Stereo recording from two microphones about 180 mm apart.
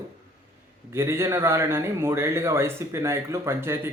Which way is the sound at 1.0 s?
15° right (ahead or behind).